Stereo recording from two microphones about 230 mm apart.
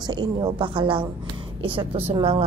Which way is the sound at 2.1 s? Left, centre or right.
Right.